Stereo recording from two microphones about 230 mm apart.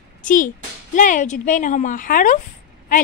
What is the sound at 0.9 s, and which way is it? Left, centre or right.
A woman's voice, left.